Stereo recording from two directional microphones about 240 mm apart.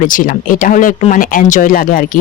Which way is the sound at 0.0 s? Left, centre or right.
Left.